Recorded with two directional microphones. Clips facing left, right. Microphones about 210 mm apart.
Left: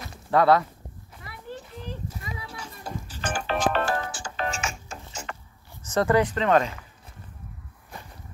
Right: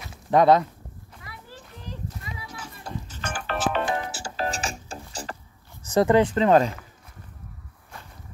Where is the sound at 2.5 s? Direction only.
5° right (ahead or behind).